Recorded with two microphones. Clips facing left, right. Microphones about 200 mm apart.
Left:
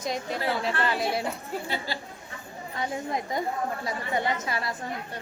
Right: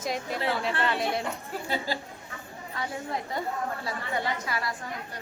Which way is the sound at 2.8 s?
15° left (ahead or behind).